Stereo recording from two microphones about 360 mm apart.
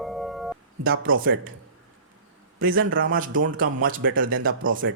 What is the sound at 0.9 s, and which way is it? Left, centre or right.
Speech, right.